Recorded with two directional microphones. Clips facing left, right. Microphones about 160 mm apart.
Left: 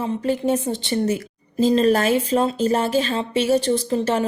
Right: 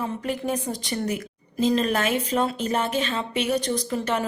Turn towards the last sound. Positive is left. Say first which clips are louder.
# left 5 dB
turn(degrees=30)  # may be behind; listen again after turning